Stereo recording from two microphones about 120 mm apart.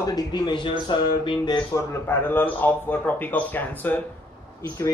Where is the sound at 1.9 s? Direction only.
20° left (ahead or behind).